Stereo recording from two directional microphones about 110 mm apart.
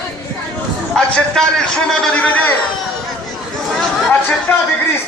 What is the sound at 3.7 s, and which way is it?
Speech, 15° left (ahead or behind).